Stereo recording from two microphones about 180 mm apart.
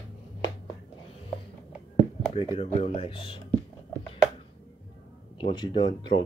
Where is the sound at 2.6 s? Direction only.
35° left (ahead or behind).